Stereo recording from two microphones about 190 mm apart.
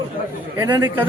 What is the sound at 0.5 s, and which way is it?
Speech, 15° right (ahead or behind).